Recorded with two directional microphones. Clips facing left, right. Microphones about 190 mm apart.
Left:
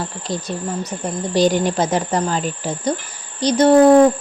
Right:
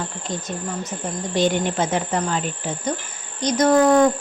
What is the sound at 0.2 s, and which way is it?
Speech, 35° left (ahead or behind).